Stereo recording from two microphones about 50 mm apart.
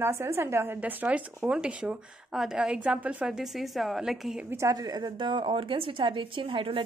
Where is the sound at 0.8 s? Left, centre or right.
Right.